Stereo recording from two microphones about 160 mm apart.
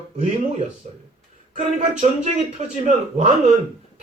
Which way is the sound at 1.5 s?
45° right (ahead or behind).